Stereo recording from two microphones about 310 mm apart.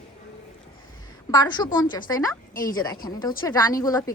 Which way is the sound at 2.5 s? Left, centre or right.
Left.